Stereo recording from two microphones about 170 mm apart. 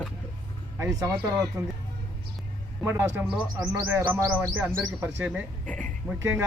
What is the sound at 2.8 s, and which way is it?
Speech, 15° right (ahead or behind).